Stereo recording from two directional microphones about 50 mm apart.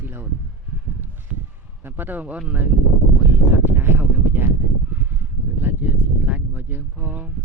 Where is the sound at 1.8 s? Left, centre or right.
Right.